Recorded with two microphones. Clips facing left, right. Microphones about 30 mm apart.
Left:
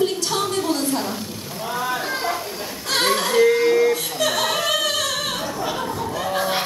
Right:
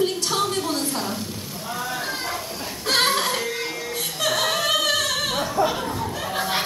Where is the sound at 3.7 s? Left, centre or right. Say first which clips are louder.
Left 14 dB; left.